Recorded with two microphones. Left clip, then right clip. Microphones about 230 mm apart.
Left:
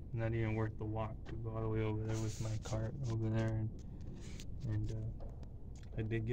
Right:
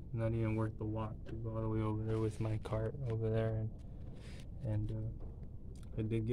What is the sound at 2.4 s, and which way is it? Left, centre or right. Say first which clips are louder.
Speech: right 5 dB; right.